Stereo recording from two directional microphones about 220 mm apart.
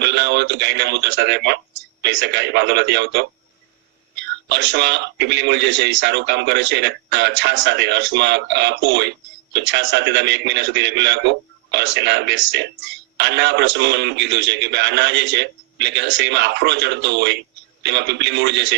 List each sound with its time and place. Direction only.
0.0 s a man's voice: 50° right (ahead or behind)